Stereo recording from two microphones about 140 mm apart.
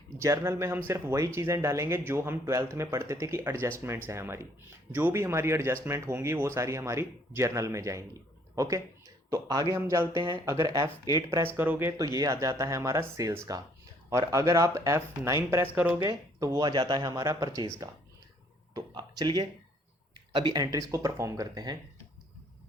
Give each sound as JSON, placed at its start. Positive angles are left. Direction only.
{"t": 0.2, "sound": "speech", "side_deg": -20}
{"t": 16.0, "sound": "speech", "side_deg": -25}